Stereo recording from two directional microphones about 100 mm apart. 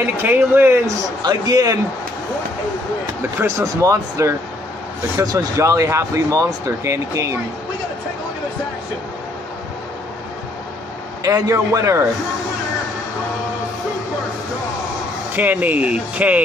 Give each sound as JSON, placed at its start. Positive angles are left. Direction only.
{"t": 0.2, "sound": "speech", "side_deg": -20}
{"t": 1.2, "sound": "speech", "side_deg": -40}
{"t": 3.2, "sound": "speech", "side_deg": -25}
{"t": 11.2, "sound": "speech", "side_deg": -30}
{"t": 15.3, "sound": "speech", "side_deg": -15}